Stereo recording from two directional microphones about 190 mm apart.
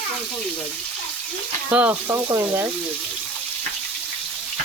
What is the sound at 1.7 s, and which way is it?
Speech, 10° right (ahead or behind).